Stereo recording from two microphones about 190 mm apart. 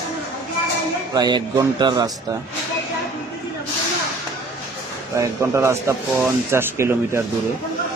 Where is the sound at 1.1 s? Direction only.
20° right (ahead or behind).